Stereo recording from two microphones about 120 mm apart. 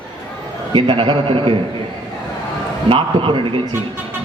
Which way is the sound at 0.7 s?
45° right (ahead or behind).